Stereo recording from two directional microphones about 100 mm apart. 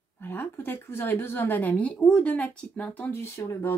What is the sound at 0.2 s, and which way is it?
A woman's voice, 20° left (ahead or behind).